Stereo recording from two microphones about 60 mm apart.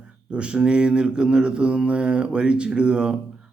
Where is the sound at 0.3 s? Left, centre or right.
Centre.